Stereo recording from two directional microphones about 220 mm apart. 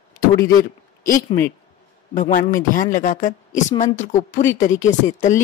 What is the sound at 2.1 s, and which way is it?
A woman's voice, 35° left (ahead or behind).